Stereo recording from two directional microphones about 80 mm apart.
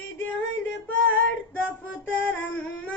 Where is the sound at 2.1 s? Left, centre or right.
Left.